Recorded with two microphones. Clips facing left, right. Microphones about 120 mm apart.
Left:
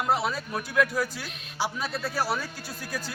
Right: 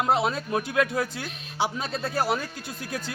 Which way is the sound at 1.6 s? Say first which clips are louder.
Right 2 dB; 25° right (ahead or behind).